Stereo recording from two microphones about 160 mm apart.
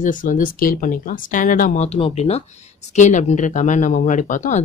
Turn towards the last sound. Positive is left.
turn(degrees=50)  # may be behind; listen again after turning